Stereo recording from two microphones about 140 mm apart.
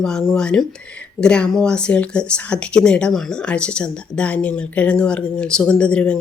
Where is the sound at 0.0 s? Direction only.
5° left (ahead or behind).